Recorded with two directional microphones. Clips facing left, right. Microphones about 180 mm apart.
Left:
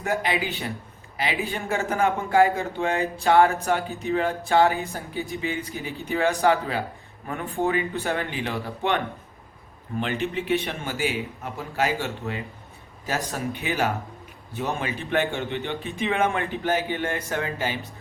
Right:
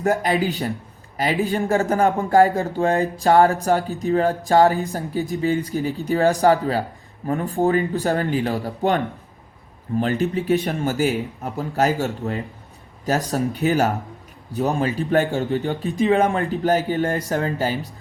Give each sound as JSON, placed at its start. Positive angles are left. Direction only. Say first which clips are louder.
{"t": 0.0, "sound": "speech", "louder": "right 6 dB", "side_deg": -40}
{"t": 10.0, "sound": "speech", "louder": "right 5 dB", "side_deg": -40}